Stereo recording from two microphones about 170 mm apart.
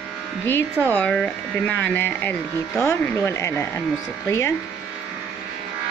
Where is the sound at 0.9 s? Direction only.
10° left (ahead or behind).